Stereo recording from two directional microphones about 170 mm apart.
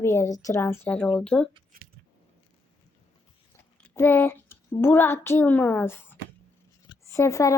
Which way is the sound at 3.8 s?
15° left (ahead or behind).